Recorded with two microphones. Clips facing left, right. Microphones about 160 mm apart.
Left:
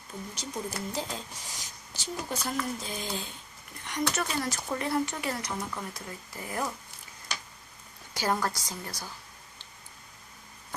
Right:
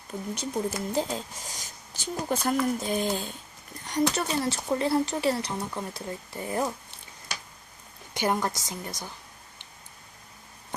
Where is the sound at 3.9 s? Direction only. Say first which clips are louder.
Right 5 dB; 30° right (ahead or behind).